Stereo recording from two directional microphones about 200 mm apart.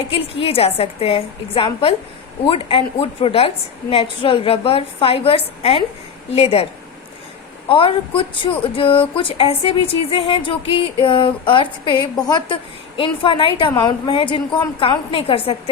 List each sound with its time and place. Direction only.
0.1 s a woman's voice: 30° left (ahead or behind)
7.7 s speech: 25° left (ahead or behind)